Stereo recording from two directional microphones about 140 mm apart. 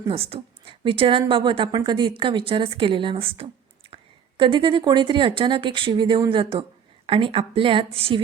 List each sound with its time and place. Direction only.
0.1 s a woman's voice: 45° right (ahead or behind)